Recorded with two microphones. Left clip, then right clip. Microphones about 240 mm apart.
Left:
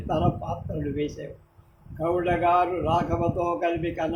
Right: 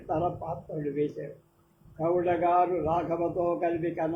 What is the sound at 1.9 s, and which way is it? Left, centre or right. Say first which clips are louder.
A man's voice: left 2 dB; left.